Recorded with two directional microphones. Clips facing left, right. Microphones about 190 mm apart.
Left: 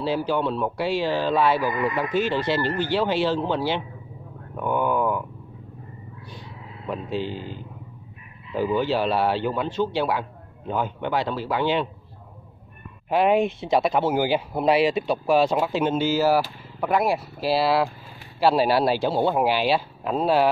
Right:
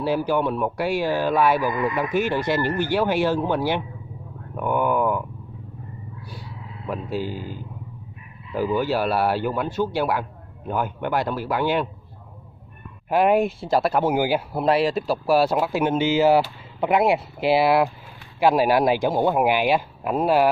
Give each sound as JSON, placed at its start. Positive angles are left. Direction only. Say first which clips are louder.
{"t": 0.0, "sound": "a man's voice", "louder": "right 2 dB", "side_deg": -15}
{"t": 6.9, "sound": "a man's voice", "louder": "right 1 dB", "side_deg": -10}
{"t": 8.5, "sound": "a man's voice", "louder": "even", "side_deg": -10}
{"t": 13.1, "sound": "speech", "louder": "right 1 dB", "side_deg": -10}
{"t": 14.0, "sound": "a man's voice", "louder": "right 1 dB", "side_deg": -10}
{"t": 14.6, "sound": "a man's voice", "louder": "left 1 dB", "side_deg": 0}